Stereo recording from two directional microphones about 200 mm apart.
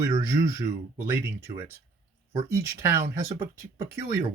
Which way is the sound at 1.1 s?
10° right (ahead or behind).